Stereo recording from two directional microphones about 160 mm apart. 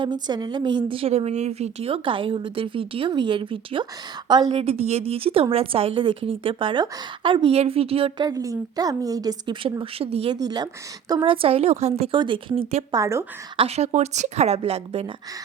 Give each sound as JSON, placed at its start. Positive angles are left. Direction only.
{"t": 0.0, "sound": "a woman's voice", "side_deg": -25}
{"t": 8.3, "sound": "a woman's voice", "side_deg": -20}
{"t": 10.4, "sound": "a woman's voice", "side_deg": -25}
{"t": 13.0, "sound": "a woman's voice", "side_deg": -20}
{"t": 13.6, "sound": "a woman's voice", "side_deg": -40}